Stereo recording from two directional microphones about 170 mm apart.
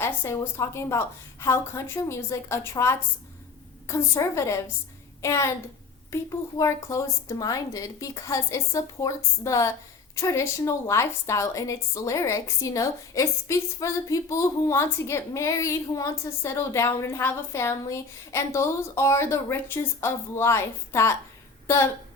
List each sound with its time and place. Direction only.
0.0 s a woman's voice: 15° left (ahead or behind)
6.6 s a woman's voice: 20° left (ahead or behind)